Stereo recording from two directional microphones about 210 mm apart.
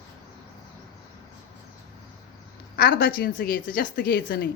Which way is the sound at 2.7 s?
45° left (ahead or behind).